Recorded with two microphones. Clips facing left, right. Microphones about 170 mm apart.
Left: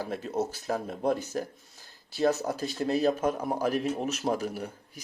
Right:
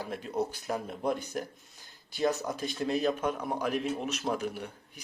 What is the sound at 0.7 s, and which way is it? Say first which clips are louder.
Speech: left 3 dB; 35° left (ahead or behind).